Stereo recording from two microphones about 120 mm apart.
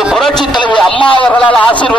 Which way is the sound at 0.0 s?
Centre (ahead or behind).